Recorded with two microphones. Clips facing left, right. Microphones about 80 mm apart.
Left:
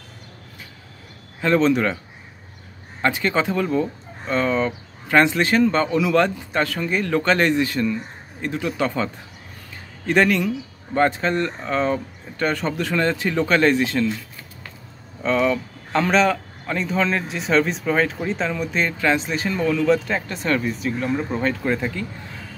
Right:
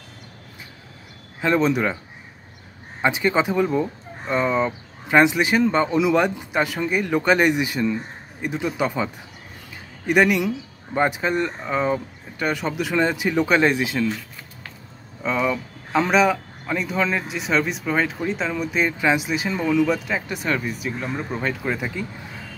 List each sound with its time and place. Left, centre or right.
1.4 s speech: centre
3.0 s speech: centre
15.2 s speech: centre